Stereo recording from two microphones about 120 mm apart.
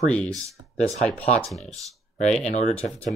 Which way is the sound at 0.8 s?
65° left (ahead or behind).